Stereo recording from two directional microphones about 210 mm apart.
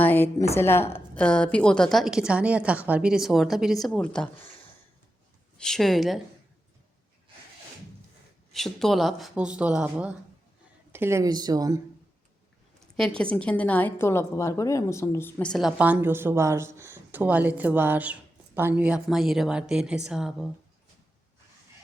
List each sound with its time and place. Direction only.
0.0 s a woman's voice: 10° left (ahead or behind)
5.5 s a woman's voice: centre (ahead or behind)
8.5 s a woman's voice: centre (ahead or behind); by 11.8 s 15° right (ahead or behind)
13.0 s a woman's voice: 5° left (ahead or behind)